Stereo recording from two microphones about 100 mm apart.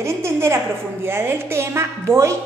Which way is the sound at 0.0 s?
25° right (ahead or behind).